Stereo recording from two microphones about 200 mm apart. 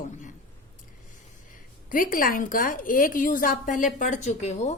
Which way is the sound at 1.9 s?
45° left (ahead or behind).